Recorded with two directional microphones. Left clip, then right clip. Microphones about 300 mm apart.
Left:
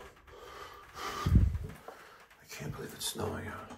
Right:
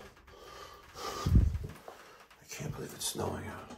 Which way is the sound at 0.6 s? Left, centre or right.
Centre.